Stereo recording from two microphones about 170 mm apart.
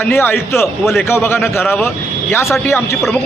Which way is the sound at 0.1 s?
10° left (ahead or behind).